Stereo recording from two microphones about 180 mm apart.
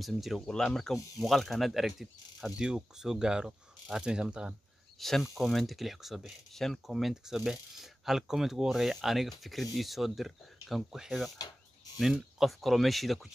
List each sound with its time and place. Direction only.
0.0 s speech: centre (ahead or behind)
11.3 s a sound: 20° left (ahead or behind)
12.0 s speech: centre (ahead or behind)